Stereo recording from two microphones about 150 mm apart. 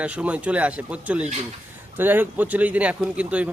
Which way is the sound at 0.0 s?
10° right (ahead or behind).